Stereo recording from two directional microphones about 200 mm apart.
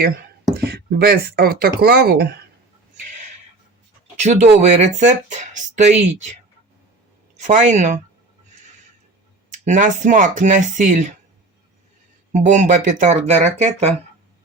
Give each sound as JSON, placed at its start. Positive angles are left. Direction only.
{"t": 0.6, "sound": "speech", "side_deg": -50}
{"t": 4.2, "sound": "speech", "side_deg": -35}
{"t": 7.4, "sound": "speech", "side_deg": -35}
{"t": 9.5, "sound": "speech", "side_deg": -40}
{"t": 12.3, "sound": "speech", "side_deg": -40}